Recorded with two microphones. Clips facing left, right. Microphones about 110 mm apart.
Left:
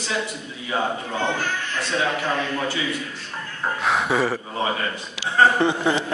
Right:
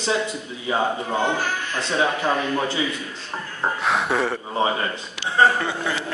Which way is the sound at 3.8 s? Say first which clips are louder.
Left 2 dB; centre (ahead or behind).